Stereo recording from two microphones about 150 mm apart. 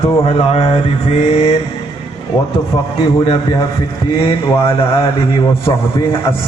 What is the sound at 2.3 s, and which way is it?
Mantra, 25° left (ahead or behind).